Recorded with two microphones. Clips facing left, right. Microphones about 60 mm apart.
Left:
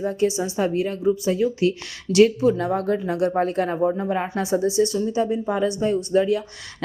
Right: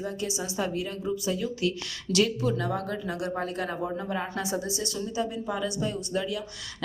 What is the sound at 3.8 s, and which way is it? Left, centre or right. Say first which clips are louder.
Speech: left 9 dB; left.